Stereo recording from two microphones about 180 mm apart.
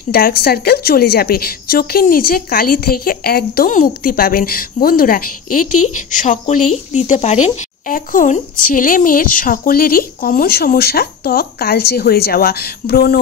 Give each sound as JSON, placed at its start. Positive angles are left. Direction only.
{"t": 0.1, "sound": "a woman's voice", "side_deg": 60}